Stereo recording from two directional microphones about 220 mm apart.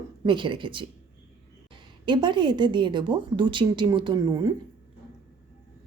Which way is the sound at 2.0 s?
20° right (ahead or behind).